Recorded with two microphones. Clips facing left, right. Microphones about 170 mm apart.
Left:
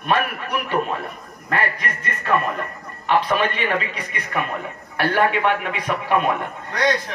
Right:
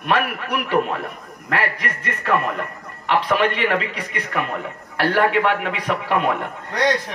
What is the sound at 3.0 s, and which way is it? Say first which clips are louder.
A man's voice: right 1 dB; 75° right (ahead or behind).